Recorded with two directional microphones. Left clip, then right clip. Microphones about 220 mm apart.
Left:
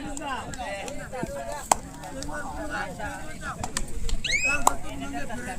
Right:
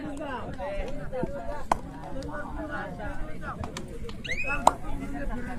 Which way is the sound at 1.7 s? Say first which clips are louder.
Left 4 dB; 15° left (ahead or behind).